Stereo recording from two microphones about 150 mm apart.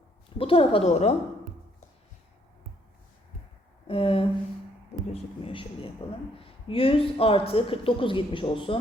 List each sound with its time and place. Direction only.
0.3 s speech: 40° left (ahead or behind)
3.8 s speech: 40° left (ahead or behind)